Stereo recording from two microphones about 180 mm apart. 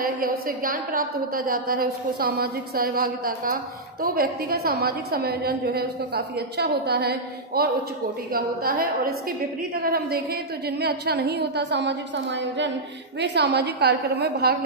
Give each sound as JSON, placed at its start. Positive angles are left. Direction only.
{"t": 0.2, "sound": "a woman's voice", "side_deg": -55}
{"t": 13.2, "sound": "a woman's voice", "side_deg": -70}